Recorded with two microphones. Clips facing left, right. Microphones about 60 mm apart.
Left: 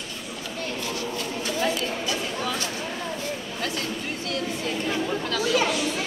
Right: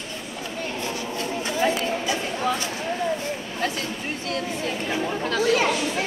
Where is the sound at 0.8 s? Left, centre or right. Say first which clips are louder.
Right 2 dB; right.